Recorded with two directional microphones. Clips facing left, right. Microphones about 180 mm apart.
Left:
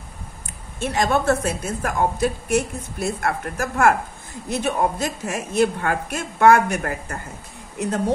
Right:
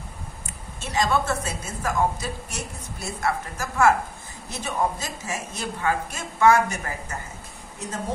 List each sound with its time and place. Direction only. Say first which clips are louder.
0.7 s a woman's voice: left 3 dB; 55° left (ahead or behind)